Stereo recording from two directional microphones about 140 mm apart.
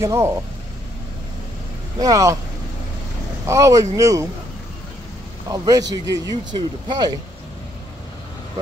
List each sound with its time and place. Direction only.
0.0 s speech: 20° right (ahead or behind)
2.0 s speech: 25° right (ahead or behind)
3.4 s speech: 20° right (ahead or behind)
5.5 s speech: 25° right (ahead or behind)